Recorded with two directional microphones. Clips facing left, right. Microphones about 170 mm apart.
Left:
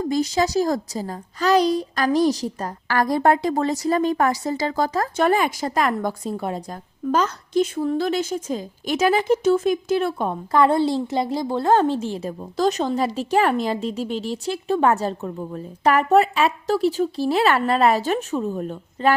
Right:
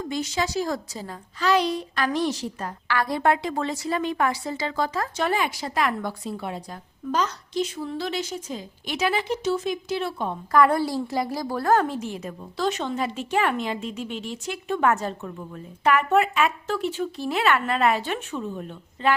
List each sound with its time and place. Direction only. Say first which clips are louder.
0.1 s a child's voice: left 6 dB; 40° left (ahead or behind)
10.5 s a child's voice: left 2 dB; 25° left (ahead or behind); by 19.1 s 40° left (ahead or behind)